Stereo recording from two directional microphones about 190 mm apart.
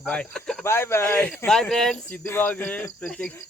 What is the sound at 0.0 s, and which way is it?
Speech, 5° left (ahead or behind).